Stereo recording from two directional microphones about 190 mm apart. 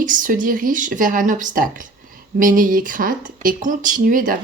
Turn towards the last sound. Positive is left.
turn(degrees=-45)  # may be behind; listen again after turning